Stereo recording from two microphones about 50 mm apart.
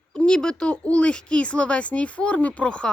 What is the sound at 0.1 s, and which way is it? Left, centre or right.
Speech, centre.